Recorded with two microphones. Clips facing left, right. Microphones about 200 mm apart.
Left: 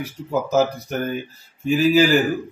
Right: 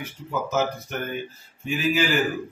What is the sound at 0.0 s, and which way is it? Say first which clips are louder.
A man's voice: left 6 dB; 35° left (ahead or behind).